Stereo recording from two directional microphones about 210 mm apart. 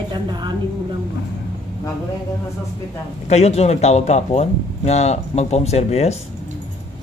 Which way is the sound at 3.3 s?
30° left (ahead or behind).